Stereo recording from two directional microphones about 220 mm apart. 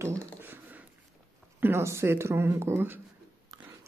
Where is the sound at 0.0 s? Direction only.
10° right (ahead or behind).